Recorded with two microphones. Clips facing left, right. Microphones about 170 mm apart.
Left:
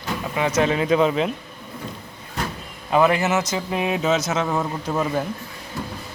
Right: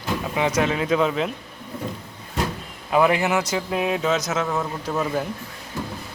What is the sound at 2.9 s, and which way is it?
Speech, 15° right (ahead or behind).